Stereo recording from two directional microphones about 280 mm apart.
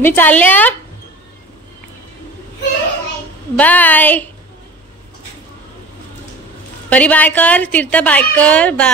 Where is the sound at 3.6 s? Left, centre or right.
Centre.